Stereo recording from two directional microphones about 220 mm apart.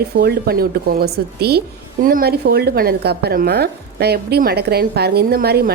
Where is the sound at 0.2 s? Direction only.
45° right (ahead or behind).